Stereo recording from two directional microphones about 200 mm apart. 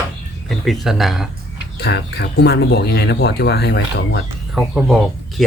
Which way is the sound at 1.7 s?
55° left (ahead or behind).